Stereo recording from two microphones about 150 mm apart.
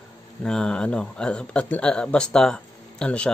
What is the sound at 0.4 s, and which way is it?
Speech, 5° left (ahead or behind).